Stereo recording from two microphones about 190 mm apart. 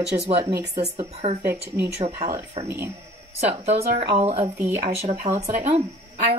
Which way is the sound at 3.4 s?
35° right (ahead or behind).